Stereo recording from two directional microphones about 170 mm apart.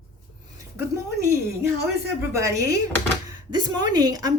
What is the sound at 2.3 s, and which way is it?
A woman's voice, 20° right (ahead or behind).